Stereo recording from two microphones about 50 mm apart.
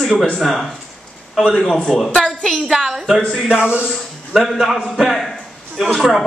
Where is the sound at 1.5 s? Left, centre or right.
Centre.